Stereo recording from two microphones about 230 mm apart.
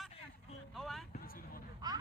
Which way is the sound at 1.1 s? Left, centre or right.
Left.